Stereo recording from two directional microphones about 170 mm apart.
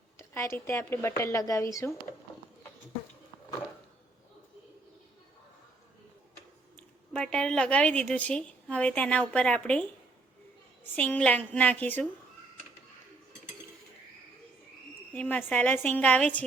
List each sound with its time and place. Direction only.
0.2 s speech: 15° left (ahead or behind)
6.7 s a woman's voice: 5° left (ahead or behind)
10.9 s speech: 10° left (ahead or behind)
15.1 s speech: 10° left (ahead or behind)